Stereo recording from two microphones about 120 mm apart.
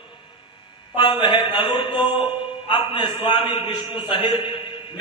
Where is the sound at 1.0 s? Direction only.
40° left (ahead or behind).